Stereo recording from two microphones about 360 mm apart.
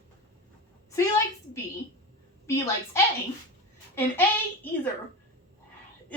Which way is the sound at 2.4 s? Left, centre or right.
Centre.